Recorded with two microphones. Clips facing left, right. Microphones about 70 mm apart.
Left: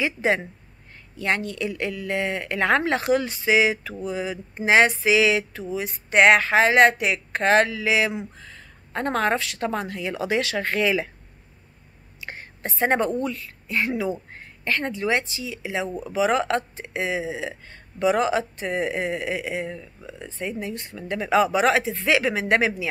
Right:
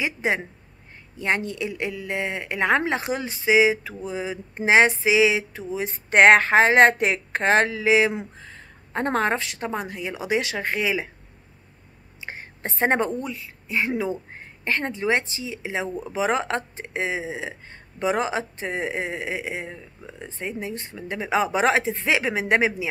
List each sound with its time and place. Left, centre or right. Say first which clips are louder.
0.0 s speech: left 2 dB; centre
12.2 s whispering: even; right
13.2 s speech: left 4 dB; centre